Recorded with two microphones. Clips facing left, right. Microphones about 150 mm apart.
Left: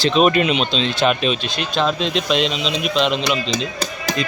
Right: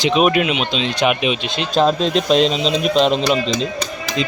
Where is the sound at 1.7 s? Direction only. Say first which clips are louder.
Right 5 dB; 40° right (ahead or behind).